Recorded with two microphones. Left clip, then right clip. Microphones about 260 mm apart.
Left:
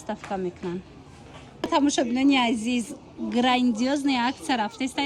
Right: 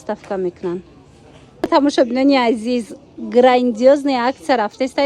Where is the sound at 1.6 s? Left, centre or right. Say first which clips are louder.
Right 9 dB; centre.